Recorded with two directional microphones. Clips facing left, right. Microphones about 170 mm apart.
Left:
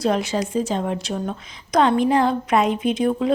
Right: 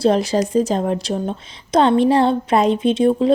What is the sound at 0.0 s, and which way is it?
A woman's voice, 35° right (ahead or behind).